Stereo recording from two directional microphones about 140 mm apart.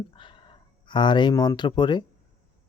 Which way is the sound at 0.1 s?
35° left (ahead or behind).